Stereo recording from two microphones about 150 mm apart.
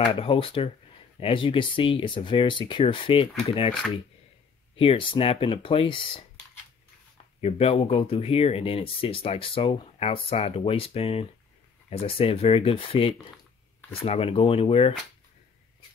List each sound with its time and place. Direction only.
0.0 s speech: 35° left (ahead or behind)
7.4 s speech: 40° left (ahead or behind)